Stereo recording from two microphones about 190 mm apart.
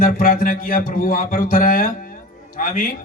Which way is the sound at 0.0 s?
45° left (ahead or behind).